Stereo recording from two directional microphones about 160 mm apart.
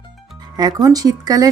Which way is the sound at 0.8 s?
25° right (ahead or behind).